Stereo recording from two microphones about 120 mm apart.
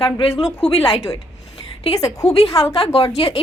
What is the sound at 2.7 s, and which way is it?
Speech, 50° left (ahead or behind).